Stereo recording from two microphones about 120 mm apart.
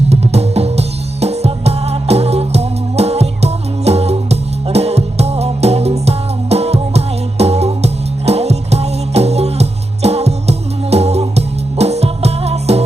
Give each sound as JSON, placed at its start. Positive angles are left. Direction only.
{"t": 0.1, "sound": "music", "side_deg": -60}